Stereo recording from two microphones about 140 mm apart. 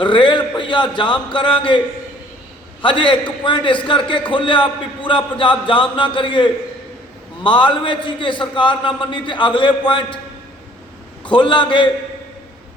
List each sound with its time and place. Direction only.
0.0 s a man's voice: 35° left (ahead or behind)
2.8 s a man's voice: 35° left (ahead or behind)
11.2 s a man's voice: 35° left (ahead or behind)